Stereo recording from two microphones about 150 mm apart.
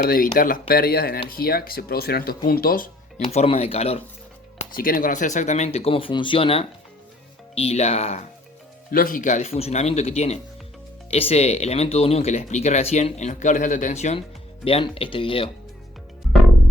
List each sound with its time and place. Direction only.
0.0 s speech: 70° left (ahead or behind)
3.3 s speech: 40° left (ahead or behind)
4.7 s speech: 70° left (ahead or behind); by 8.2 s 45° left (ahead or behind)
8.9 s speech: 70° left (ahead or behind); by 15.4 s 35° left (ahead or behind)